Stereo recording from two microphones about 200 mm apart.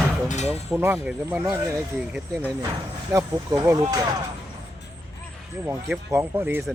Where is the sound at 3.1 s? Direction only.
15° right (ahead or behind).